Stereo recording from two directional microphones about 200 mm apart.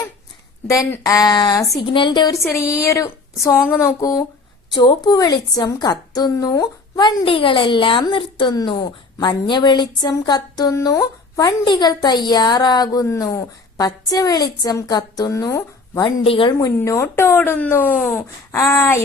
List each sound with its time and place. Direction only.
0.7 s a woman's voice: 15° left (ahead or behind)